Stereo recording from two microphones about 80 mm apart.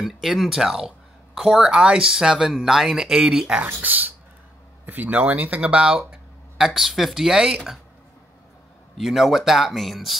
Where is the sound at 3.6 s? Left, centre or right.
Right; by 7.7 s centre.